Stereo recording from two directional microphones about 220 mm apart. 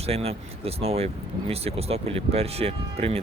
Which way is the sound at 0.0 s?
25° right (ahead or behind).